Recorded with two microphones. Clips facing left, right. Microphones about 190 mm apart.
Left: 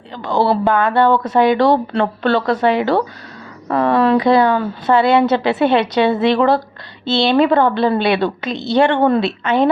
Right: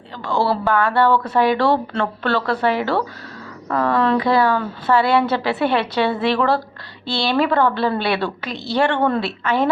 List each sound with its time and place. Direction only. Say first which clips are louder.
0.2 s a woman's voice: left 4 dB; 20° left (ahead or behind)